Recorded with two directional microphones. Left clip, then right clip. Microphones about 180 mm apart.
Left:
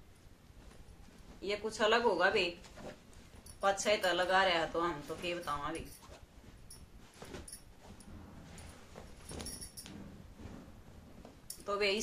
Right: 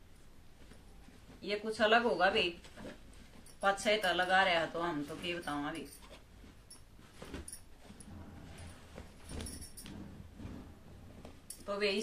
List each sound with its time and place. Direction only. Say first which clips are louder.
1.4 s speech: right 1 dB; 50° left (ahead or behind)
3.6 s speech: even; 45° left (ahead or behind)
11.6 s speech: left 1 dB; 50° left (ahead or behind)